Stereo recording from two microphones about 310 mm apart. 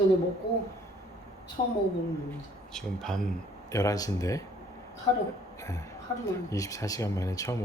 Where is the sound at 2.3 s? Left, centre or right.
Centre.